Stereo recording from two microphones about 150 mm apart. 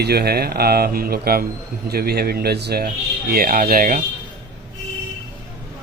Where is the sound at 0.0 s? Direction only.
90° right.